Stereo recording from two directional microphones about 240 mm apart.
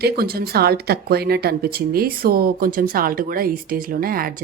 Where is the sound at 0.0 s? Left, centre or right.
Right.